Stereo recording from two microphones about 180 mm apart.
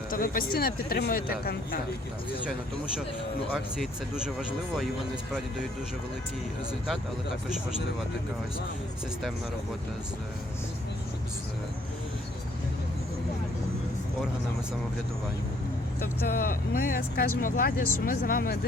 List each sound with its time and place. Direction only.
0.1 s speech: 55° left (ahead or behind)
3.8 s speech: centre (ahead or behind)
16.0 s speech: 55° left (ahead or behind)